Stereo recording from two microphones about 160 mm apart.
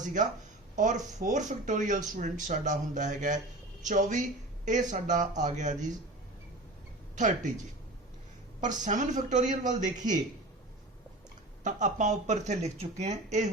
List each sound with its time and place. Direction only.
0.0 s speech: 50° right (ahead or behind)
7.2 s speech: 50° right (ahead or behind)
8.6 s speech: 50° right (ahead or behind)
11.6 s speech: 50° right (ahead or behind)